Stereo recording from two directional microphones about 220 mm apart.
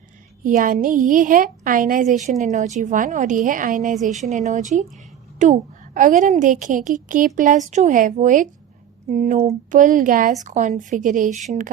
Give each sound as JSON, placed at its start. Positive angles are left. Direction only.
{"t": 0.4, "sound": "a woman's voice", "side_deg": -40}